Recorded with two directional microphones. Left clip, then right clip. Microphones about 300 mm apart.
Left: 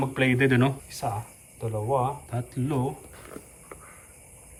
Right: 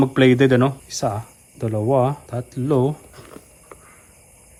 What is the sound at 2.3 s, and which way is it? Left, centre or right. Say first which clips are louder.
Speech: right 9 dB; centre.